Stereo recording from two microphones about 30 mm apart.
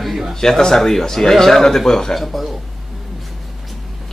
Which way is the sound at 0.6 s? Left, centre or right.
Centre.